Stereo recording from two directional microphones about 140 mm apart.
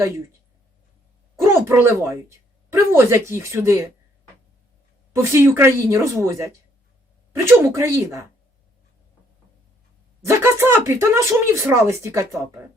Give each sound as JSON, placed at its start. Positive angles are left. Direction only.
{"t": 1.4, "sound": "a sound", "side_deg": -20}
{"t": 2.7, "sound": "speech", "side_deg": -20}
{"t": 5.1, "sound": "speech", "side_deg": -20}
{"t": 10.2, "sound": "speech", "side_deg": -15}